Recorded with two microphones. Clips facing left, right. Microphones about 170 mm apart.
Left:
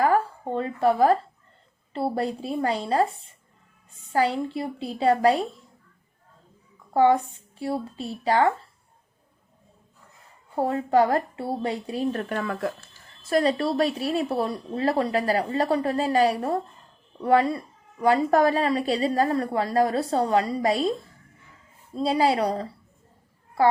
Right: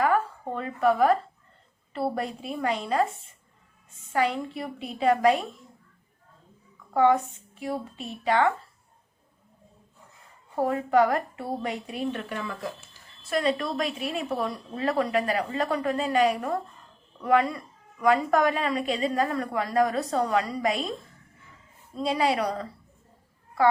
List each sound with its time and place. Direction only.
0.0 s a sound: 30° left (ahead or behind)
1.9 s speech: 30° left (ahead or behind)
4.1 s speech: 30° left (ahead or behind)
6.9 s speech: 30° left (ahead or behind)
10.6 s speech: 30° left (ahead or behind)
12.3 s speech: 55° left (ahead or behind)
13.3 s speech: 35° left (ahead or behind)
21.9 s speech: 30° left (ahead or behind)